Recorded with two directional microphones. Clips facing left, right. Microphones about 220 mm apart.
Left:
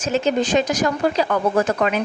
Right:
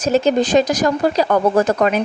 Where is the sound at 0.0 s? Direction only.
40° right (ahead or behind).